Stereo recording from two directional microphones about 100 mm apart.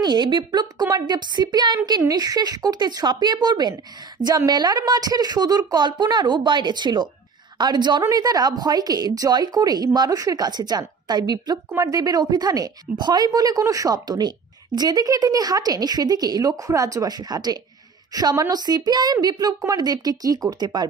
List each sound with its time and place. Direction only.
0.0 s a woman's voice: 50° right (ahead or behind)